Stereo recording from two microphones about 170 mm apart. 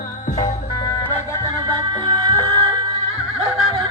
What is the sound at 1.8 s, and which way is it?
Music, 25° right (ahead or behind).